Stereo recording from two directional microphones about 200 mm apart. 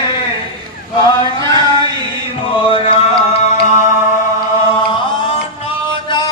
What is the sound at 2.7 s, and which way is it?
Music, 25° left (ahead or behind).